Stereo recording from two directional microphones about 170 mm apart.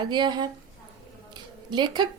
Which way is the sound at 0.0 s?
25° right (ahead or behind).